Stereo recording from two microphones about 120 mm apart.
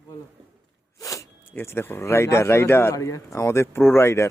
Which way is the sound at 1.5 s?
15° left (ahead or behind).